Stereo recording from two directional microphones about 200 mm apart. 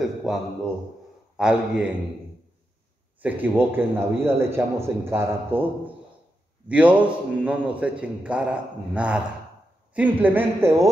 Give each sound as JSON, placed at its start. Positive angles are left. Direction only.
{"t": 0.0, "sound": "a sound", "side_deg": 0}
{"t": 1.3, "sound": "a man's voice", "side_deg": -5}
{"t": 3.2, "sound": "a man's voice", "side_deg": -10}
{"t": 6.7, "sound": "a man's voice", "side_deg": -5}